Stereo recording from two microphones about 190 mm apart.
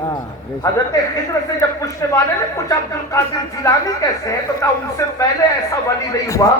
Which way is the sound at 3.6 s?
15° left (ahead or behind).